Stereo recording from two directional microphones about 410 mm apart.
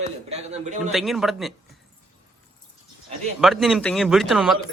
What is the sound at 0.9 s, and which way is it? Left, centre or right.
Speech, centre.